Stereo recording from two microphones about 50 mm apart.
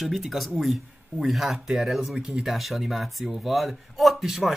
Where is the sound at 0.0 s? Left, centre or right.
Centre.